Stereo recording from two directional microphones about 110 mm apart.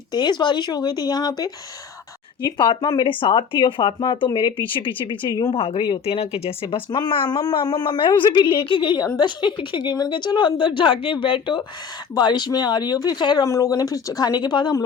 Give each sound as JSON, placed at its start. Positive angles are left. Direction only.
{"t": 0.1, "sound": "speech", "side_deg": 40}
{"t": 2.6, "sound": "a woman's voice", "side_deg": 45}
{"t": 5.5, "sound": "a woman's voice", "side_deg": 60}